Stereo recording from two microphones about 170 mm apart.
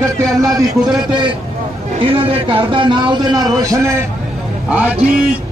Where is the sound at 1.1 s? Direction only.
30° right (ahead or behind).